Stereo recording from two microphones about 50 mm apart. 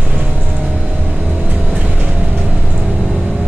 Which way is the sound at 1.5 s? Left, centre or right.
Right.